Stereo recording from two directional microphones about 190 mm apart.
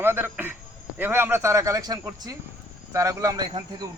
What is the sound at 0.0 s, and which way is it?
Speech, 10° right (ahead or behind).